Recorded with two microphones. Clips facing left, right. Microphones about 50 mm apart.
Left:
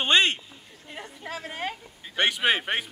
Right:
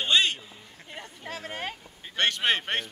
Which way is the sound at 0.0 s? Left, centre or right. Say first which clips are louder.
Left 3 dB; left.